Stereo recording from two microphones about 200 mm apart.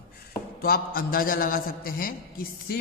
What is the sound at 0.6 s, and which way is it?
A man's voice, 50° left (ahead or behind).